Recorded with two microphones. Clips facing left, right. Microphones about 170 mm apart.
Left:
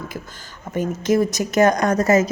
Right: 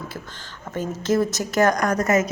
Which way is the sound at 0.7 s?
15° left (ahead or behind).